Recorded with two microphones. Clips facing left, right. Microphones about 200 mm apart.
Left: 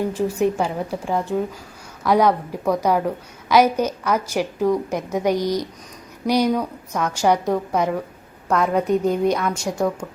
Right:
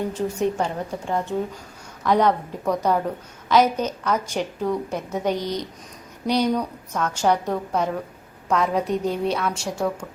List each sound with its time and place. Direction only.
0.1 s a woman's voice: 10° left (ahead or behind)
9.4 s a woman's voice: 5° right (ahead or behind)